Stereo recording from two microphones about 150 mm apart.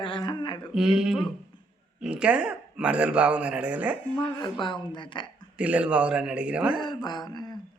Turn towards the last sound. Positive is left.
turn(degrees=30)  # may be behind; listen again after turning